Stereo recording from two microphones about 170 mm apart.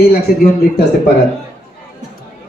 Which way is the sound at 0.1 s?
65° left (ahead or behind).